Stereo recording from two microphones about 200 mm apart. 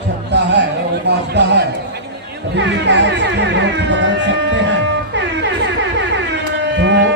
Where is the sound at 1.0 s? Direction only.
60° right (ahead or behind).